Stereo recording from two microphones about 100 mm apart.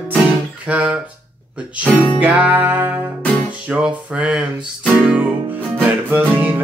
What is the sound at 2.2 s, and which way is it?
Music, 15° right (ahead or behind).